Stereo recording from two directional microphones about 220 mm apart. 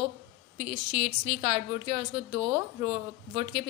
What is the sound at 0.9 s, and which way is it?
A woman's voice, 25° right (ahead or behind).